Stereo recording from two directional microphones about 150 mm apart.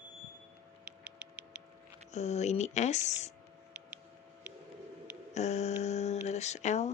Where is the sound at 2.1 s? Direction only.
50° left (ahead or behind).